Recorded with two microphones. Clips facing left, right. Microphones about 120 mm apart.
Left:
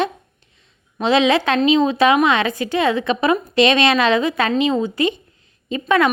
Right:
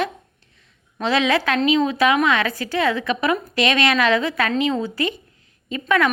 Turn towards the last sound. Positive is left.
turn(degrees=25)  # may be behind; listen again after turning